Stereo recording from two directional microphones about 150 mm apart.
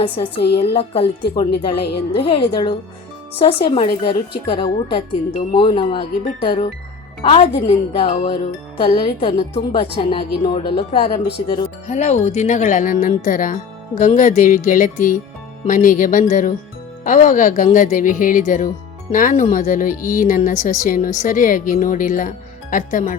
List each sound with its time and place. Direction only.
0.0 s speech: 35° left (ahead or behind)
0.4 s a woman's voice: 90° left
0.8 s speech: 40° left (ahead or behind)
1.7 s a woman's voice: 90° left
2.3 s speech: 35° left (ahead or behind)
11.9 s speech: 50° left (ahead or behind)